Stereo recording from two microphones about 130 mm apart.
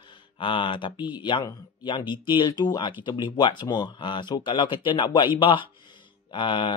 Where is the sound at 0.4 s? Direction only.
40° left (ahead or behind).